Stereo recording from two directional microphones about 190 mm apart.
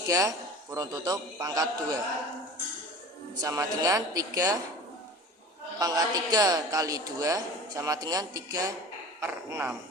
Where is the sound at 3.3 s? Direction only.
15° right (ahead or behind).